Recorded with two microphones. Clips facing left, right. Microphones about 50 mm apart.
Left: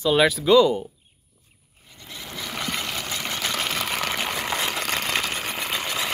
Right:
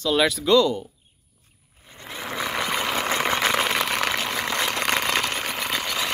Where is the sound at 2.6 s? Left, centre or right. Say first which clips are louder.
Right 3 dB; centre.